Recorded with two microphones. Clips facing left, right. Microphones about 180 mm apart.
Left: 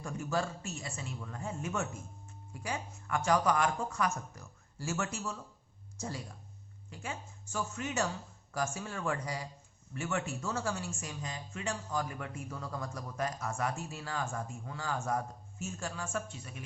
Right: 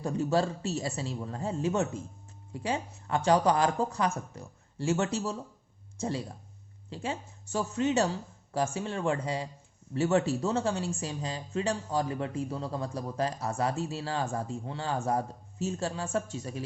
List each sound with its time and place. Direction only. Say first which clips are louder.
0.0 s speech: right 7 dB; 30° right (ahead or behind)